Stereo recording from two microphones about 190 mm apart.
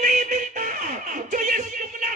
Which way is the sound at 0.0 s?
40° right (ahead or behind).